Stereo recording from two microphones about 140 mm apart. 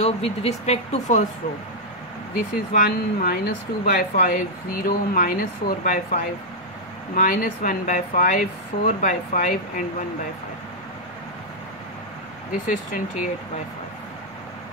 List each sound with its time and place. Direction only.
0.0 s speech: 50° left (ahead or behind)
2.3 s speech: 85° left
12.6 s speech: 70° left (ahead or behind)